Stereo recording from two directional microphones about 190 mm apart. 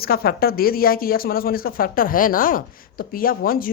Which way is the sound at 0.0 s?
55° left (ahead or behind).